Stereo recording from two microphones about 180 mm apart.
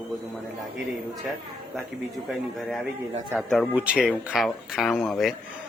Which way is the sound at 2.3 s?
Centre (ahead or behind).